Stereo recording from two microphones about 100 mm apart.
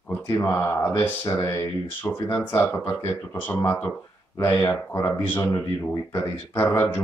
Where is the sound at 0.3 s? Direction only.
25° left (ahead or behind).